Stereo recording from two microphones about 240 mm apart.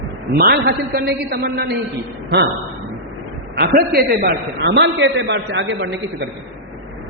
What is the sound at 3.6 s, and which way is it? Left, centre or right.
A man's voice, right.